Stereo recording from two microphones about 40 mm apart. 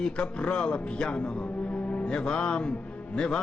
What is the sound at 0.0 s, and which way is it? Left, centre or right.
A man's voice, left.